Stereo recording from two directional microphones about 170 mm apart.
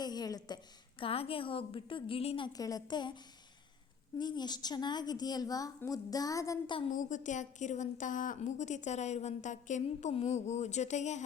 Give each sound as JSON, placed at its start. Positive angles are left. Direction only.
{"t": 0.0, "sound": "a woman's voice", "side_deg": 25}
{"t": 4.2, "sound": "a woman's voice", "side_deg": 25}
{"t": 6.9, "sound": "a woman's voice", "side_deg": 50}